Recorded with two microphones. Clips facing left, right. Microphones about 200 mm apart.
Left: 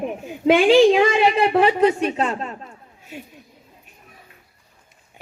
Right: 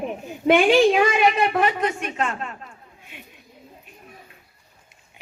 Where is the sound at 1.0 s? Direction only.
25° left (ahead or behind).